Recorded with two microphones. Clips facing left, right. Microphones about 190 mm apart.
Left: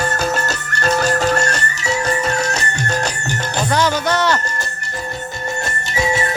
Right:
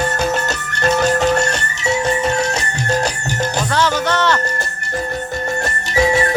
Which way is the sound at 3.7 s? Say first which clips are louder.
Left 2 dB; 15° left (ahead or behind).